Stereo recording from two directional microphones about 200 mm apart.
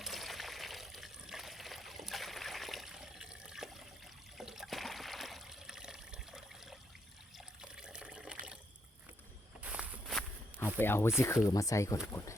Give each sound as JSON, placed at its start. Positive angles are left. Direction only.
{"t": 0.0, "sound": "water", "side_deg": 0}
{"t": 9.6, "sound": "walk", "side_deg": -5}
{"t": 10.8, "sound": "speech", "side_deg": 10}